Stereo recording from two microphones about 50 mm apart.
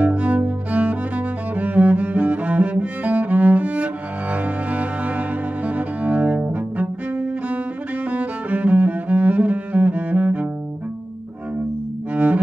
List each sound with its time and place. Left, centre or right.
0.0 s music: right
0.4 s cello: right
12.1 s cello: right